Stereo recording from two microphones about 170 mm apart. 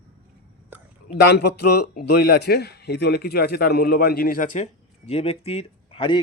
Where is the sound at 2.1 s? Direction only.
70° left (ahead or behind).